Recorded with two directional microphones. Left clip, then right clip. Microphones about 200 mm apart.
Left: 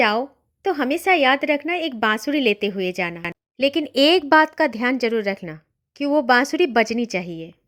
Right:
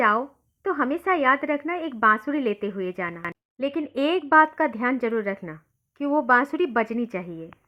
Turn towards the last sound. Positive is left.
turn(degrees=30)  # may be behind; listen again after turning